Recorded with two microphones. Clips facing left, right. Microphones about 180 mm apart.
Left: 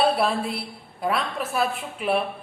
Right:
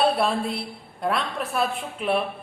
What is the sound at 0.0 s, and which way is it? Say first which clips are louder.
A woman's voice: even; centre (ahead or behind).